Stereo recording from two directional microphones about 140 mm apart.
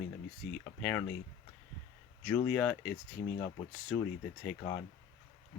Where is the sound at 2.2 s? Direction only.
5° left (ahead or behind).